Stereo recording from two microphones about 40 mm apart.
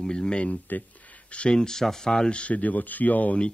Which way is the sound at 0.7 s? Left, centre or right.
Left.